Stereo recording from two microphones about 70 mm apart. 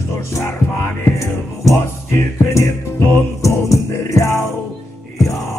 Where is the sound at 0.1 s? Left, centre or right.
Left.